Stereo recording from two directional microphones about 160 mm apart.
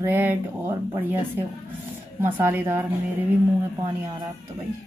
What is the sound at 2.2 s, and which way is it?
Speech, 15° right (ahead or behind).